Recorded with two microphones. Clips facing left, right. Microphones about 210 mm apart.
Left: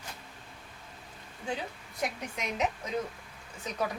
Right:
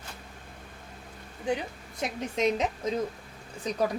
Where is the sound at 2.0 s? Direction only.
30° right (ahead or behind).